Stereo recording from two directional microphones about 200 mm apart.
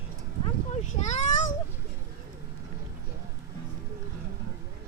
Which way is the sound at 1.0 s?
35° left (ahead or behind).